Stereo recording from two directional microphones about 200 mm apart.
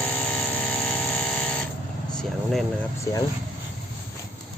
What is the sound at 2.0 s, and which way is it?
Speech, centre (ahead or behind).